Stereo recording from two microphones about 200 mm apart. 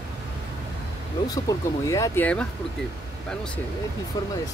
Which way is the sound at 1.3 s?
15° left (ahead or behind).